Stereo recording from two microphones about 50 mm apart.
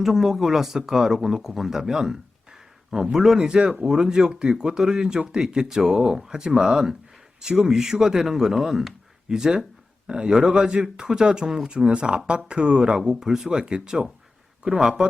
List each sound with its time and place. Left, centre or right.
0.0 s speech: centre